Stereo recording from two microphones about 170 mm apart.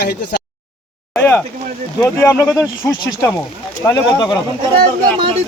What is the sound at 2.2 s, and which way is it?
Speech, 15° left (ahead or behind).